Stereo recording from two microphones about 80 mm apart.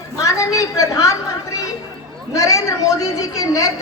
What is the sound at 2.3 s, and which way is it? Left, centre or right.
Speech, left.